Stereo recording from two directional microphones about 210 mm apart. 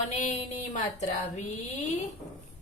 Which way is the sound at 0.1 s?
35° left (ahead or behind).